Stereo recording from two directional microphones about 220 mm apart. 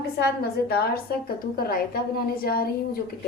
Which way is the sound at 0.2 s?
45° left (ahead or behind).